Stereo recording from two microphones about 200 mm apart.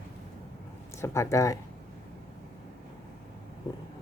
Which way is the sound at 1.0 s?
15° left (ahead or behind).